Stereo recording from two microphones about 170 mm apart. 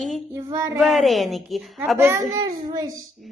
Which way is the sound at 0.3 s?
15° right (ahead or behind).